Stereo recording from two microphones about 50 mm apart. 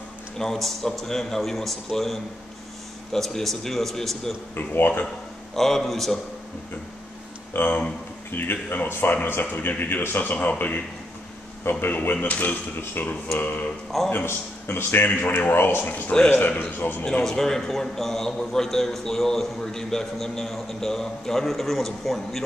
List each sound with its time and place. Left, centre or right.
0.4 s a man's voice: centre
4.6 s speech: left
5.0 s speech: centre
7.5 s speech: left
11.8 s a man's voice: left
13.0 s a man's voice: left
14.1 s speech: left
15.0 s a man's voice: left
16.1 s a man's voice: centre
16.8 s a man's voice: left
17.2 s a man's voice: centre